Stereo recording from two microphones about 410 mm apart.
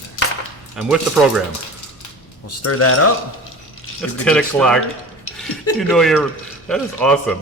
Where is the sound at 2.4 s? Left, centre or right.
Left.